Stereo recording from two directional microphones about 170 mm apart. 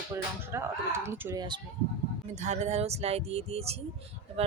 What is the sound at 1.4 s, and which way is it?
Speech, 25° right (ahead or behind).